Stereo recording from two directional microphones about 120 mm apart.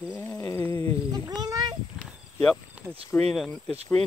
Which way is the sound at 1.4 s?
35° right (ahead or behind).